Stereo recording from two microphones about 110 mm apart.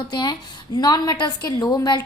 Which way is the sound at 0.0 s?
40° left (ahead or behind).